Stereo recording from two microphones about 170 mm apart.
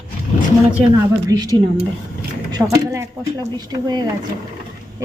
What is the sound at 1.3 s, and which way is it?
Speech, 20° right (ahead or behind).